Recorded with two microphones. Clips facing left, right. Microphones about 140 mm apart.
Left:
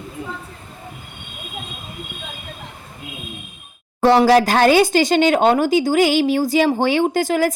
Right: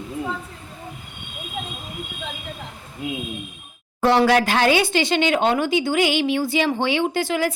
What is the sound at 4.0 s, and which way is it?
Speech, 35° left (ahead or behind).